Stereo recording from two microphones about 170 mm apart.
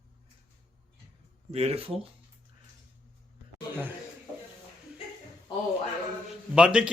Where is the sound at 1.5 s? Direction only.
35° right (ahead or behind).